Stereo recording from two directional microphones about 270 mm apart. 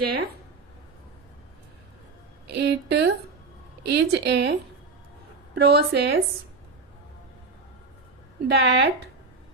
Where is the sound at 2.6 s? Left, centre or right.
Right.